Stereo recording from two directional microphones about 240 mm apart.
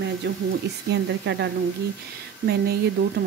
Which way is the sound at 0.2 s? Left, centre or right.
Right.